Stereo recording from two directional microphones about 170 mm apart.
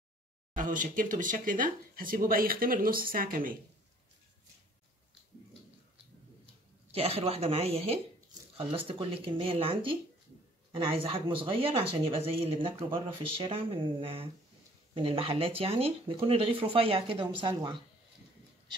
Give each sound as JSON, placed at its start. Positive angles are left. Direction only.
{"t": 0.6, "sound": "speech", "side_deg": -50}
{"t": 6.9, "sound": "speech", "side_deg": -35}